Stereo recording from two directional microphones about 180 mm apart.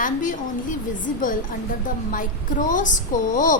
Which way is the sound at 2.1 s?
50° left (ahead or behind).